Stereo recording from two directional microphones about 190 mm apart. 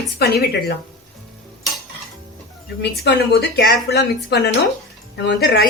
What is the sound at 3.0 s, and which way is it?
Speech, 60° left (ahead or behind).